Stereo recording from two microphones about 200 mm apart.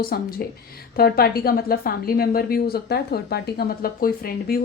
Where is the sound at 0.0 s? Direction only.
50° left (ahead or behind).